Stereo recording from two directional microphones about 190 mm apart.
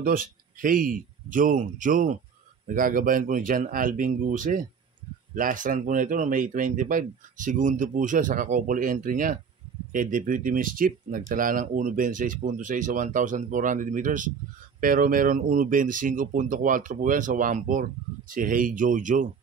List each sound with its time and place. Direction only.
0.0 s speech: 50° right (ahead or behind)